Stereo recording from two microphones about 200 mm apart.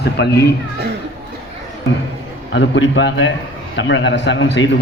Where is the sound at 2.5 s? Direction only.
65° left (ahead or behind).